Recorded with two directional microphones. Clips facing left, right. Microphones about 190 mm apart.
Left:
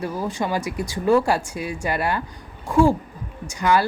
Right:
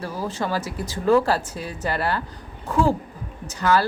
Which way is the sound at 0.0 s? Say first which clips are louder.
Left 2 dB; 15° left (ahead or behind).